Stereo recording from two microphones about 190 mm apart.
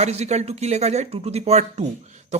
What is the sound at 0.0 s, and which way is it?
A man's voice, 35° right (ahead or behind).